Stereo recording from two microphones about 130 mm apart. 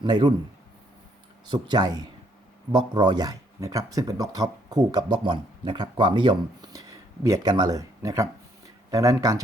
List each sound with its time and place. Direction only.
0.0 s speech: 35° right (ahead or behind)
1.5 s speech: 35° right (ahead or behind)